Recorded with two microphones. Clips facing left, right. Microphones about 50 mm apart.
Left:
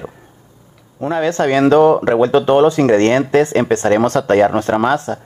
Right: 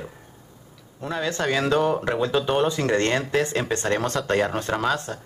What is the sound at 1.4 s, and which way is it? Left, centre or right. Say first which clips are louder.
Speech: left 11 dB; left.